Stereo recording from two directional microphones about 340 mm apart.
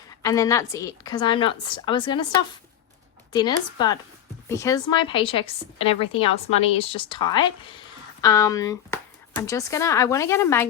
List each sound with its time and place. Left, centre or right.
0.2 s a woman's voice: centre
3.3 s a woman's voice: centre